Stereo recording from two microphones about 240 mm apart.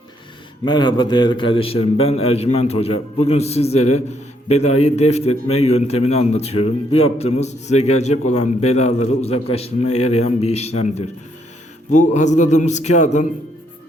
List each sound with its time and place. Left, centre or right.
0.6 s a man's voice: centre